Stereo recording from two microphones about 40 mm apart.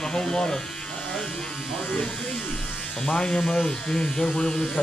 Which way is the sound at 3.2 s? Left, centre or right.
Left.